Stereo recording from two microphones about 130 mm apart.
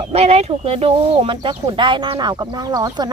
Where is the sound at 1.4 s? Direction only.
35° right (ahead or behind).